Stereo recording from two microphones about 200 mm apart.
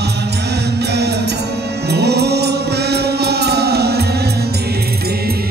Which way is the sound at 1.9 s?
55° right (ahead or behind).